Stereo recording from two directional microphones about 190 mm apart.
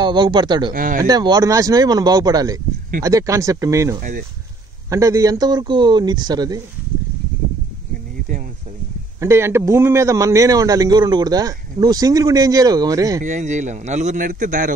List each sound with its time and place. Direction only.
0.0 s speech: 20° right (ahead or behind)
0.7 s speech: 45° right (ahead or behind)
1.0 s a man's voice: 20° right (ahead or behind)
9.2 s a man's voice: 15° right (ahead or behind)
13.2 s a man's voice: 40° right (ahead or behind)